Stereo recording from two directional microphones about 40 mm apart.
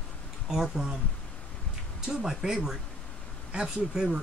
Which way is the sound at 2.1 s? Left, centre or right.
Centre.